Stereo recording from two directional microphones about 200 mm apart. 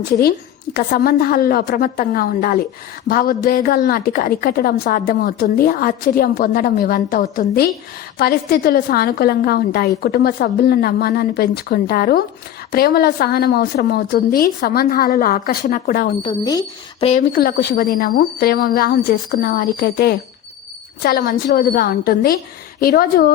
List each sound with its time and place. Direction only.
0.2 s a woman's voice: 50° left (ahead or behind)
16.2 s speech: 20° left (ahead or behind)
17.1 s a woman's voice: 45° left (ahead or behind)